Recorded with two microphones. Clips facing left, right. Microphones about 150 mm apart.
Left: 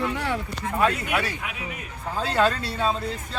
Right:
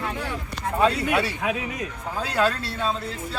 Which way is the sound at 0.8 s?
25° right (ahead or behind).